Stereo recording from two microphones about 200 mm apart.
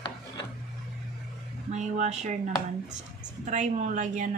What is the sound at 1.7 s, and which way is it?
Speech, 35° right (ahead or behind).